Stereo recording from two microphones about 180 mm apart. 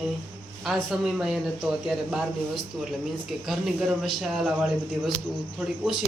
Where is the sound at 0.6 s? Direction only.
Centre (ahead or behind).